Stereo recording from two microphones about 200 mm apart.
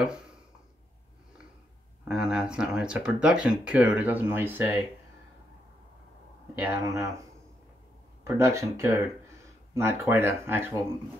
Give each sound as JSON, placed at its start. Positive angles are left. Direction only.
{"t": 0.0, "sound": "a sound", "side_deg": -5}
{"t": 2.0, "sound": "speech", "side_deg": -5}
{"t": 6.5, "sound": "speech", "side_deg": -15}
{"t": 8.2, "sound": "speech", "side_deg": -15}